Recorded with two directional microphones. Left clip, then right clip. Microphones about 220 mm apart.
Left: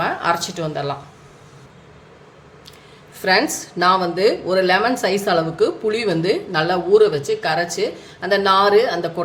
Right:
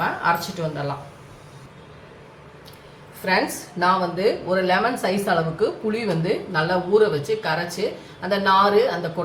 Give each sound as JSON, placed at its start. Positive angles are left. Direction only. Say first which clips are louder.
{"t": 0.2, "sound": "speech", "louder": "left 2 dB", "side_deg": 50}
{"t": 3.2, "sound": "speech", "louder": "left 4 dB", "side_deg": 45}